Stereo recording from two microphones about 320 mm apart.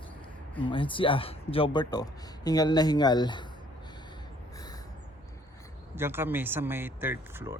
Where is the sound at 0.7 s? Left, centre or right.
Centre.